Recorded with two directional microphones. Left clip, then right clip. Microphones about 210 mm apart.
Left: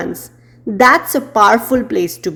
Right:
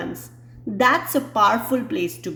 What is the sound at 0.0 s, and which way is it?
A woman's voice, 40° left (ahead or behind).